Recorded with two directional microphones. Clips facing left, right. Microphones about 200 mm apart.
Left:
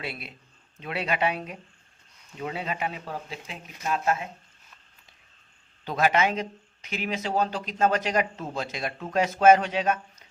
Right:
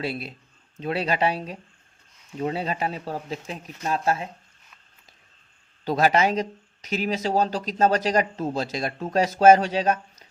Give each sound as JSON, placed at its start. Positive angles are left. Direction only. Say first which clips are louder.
{"t": 0.0, "sound": "speech", "louder": "right 7 dB", "side_deg": -35}
{"t": 5.8, "sound": "speech", "louder": "right 3 dB", "side_deg": -35}